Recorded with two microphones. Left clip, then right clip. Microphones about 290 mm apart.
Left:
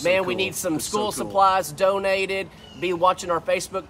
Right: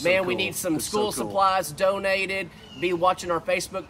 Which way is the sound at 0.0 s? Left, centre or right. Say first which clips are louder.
Left 1 dB; centre.